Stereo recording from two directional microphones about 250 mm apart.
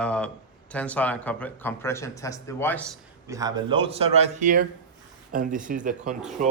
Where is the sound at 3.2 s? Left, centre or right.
Centre.